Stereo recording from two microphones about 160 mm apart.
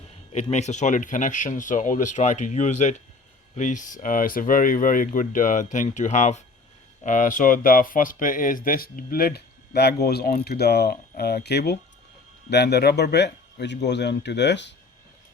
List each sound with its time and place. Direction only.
0.5 s a man's voice: 45° left (ahead or behind); by 14.7 s 90° left